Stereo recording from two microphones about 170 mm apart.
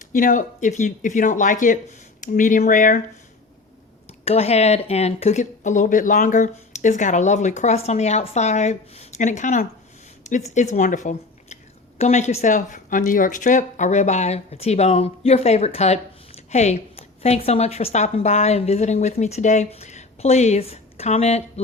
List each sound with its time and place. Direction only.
0.1 s speech: 50° left (ahead or behind)
4.3 s speech: 40° left (ahead or behind)